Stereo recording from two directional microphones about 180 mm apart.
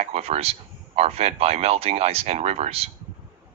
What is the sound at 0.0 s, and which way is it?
Speech, 35° right (ahead or behind).